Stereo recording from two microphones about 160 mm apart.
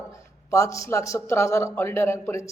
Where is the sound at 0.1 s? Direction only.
20° left (ahead or behind).